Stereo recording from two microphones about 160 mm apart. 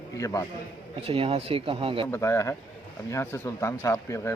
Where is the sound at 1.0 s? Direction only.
35° right (ahead or behind).